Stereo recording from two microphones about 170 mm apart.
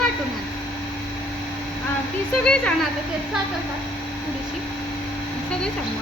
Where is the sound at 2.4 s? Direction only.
5° left (ahead or behind).